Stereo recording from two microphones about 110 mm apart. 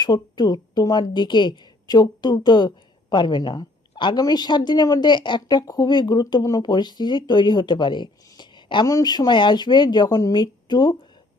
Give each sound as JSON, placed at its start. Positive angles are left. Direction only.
{"t": 0.0, "sound": "a woman's voice", "side_deg": 40}